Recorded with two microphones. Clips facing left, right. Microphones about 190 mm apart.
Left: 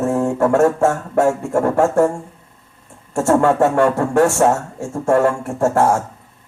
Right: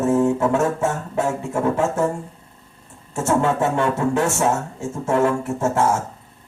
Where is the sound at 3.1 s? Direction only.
70° left (ahead or behind).